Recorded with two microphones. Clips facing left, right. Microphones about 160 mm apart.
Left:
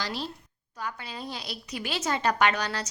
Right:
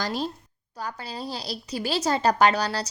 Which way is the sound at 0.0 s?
45° right (ahead or behind).